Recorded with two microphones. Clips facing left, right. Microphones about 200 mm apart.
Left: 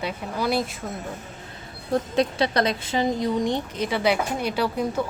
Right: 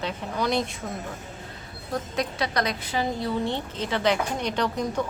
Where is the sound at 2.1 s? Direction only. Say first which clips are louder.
Left 5 dB; 30° left (ahead or behind).